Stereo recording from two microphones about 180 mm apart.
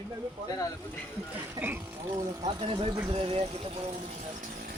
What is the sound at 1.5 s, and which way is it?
Speech, 10° right (ahead or behind).